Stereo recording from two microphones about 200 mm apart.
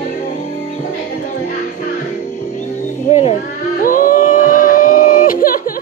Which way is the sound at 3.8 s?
45° left (ahead or behind).